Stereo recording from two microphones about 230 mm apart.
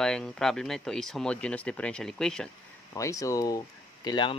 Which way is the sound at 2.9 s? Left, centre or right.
Centre.